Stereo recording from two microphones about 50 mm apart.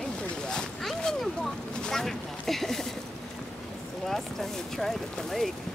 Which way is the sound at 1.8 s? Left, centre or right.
Centre.